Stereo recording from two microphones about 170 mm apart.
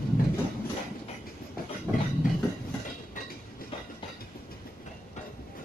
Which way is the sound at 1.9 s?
10° right (ahead or behind).